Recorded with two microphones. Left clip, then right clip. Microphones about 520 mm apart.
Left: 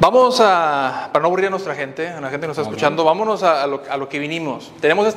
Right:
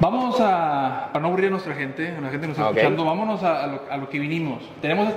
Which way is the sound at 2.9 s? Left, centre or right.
Left.